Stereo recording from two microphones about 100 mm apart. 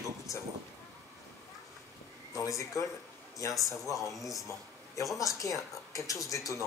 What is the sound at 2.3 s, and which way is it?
Speech, 35° left (ahead or behind).